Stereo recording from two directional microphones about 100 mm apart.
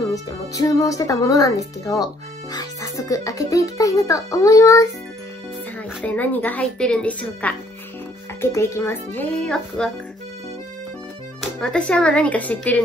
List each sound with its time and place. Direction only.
0.0 s speech: 35° left (ahead or behind)
6.0 s a woman's voice: 15° left (ahead or behind)
8.4 s speech: 25° left (ahead or behind)
9.8 s a woman's voice: 5° left (ahead or behind)
11.6 s a woman's voice: 10° left (ahead or behind)